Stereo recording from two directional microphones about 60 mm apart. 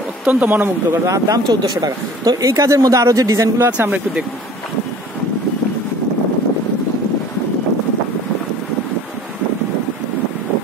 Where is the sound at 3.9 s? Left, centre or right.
Centre.